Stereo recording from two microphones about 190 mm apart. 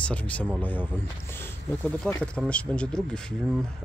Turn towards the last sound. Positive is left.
turn(degrees=5)  # may be behind; listen again after turning